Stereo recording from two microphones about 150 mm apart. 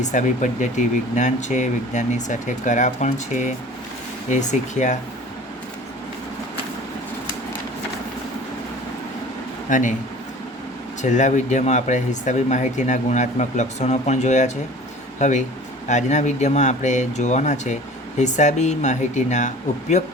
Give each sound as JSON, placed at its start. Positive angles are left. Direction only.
{"t": 0.0, "sound": "speech", "side_deg": 55}
{"t": 9.6, "sound": "a man's voice", "side_deg": 60}
{"t": 11.0, "sound": "speech", "side_deg": 55}